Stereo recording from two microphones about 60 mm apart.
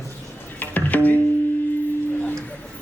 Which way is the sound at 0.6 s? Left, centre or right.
Left.